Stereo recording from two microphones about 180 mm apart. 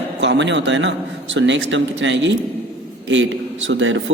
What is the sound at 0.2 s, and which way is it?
A man's voice, 80° right.